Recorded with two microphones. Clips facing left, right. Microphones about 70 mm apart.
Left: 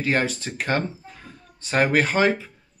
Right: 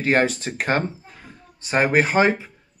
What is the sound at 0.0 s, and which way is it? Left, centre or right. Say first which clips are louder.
Speech: right 4 dB; right.